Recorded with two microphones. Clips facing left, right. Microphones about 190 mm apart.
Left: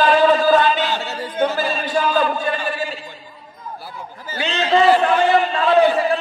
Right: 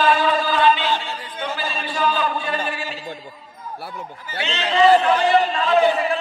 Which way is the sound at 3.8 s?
65° right (ahead or behind).